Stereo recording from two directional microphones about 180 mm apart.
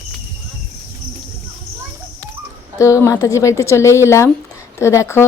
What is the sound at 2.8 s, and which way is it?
A woman's voice, 15° left (ahead or behind).